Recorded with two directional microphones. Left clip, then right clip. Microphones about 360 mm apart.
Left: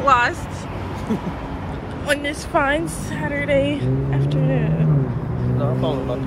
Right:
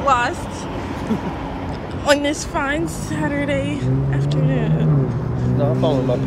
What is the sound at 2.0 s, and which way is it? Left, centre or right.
A woman's voice, centre.